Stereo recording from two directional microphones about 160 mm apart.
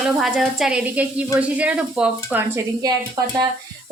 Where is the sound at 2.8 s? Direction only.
25° right (ahead or behind).